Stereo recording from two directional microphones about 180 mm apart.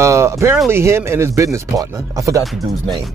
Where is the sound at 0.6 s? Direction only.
15° right (ahead or behind).